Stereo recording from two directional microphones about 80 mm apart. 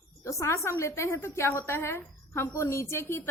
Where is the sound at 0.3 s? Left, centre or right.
Left.